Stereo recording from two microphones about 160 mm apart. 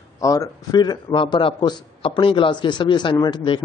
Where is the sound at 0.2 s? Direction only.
20° left (ahead or behind).